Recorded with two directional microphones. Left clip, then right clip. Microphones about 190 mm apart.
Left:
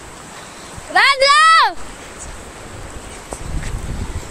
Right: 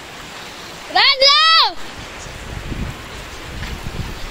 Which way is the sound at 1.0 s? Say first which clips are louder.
Left 1 dB; 5° left (ahead or behind).